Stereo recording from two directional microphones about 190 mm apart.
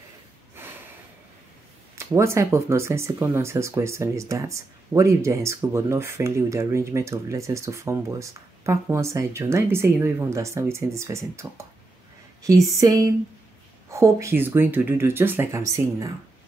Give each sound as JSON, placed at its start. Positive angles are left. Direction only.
{"t": 0.6, "sound": "snort", "side_deg": -10}
{"t": 2.0, "sound": "speech", "side_deg": -15}
{"t": 12.4, "sound": "a sound", "side_deg": -20}
{"t": 13.8, "sound": "speech", "side_deg": -15}